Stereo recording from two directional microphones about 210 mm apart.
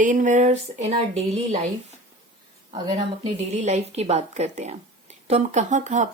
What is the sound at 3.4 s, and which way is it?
Speech, 30° right (ahead or behind).